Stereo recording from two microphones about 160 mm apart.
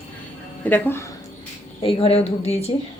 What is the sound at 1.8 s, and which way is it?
Speech, 35° left (ahead or behind).